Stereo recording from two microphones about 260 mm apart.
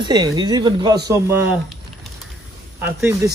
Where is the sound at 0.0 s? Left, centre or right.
Centre.